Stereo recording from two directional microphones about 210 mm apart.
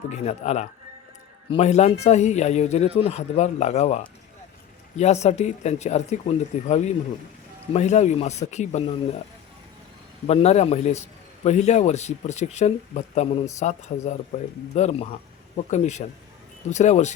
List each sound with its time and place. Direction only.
0.1 s a man's voice: 30° left (ahead or behind)
10.2 s a man's voice: 30° left (ahead or behind)